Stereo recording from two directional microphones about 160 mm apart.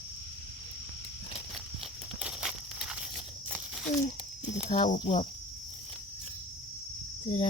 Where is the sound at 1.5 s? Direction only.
5° right (ahead or behind).